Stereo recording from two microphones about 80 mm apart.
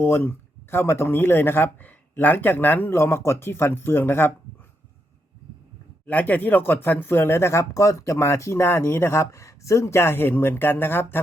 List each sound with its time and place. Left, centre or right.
0.0 s speech: left
6.1 s speech: left